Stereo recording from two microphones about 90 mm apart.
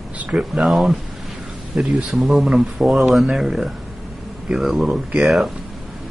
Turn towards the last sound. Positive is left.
turn(degrees=0)  # may be behind; listen again after turning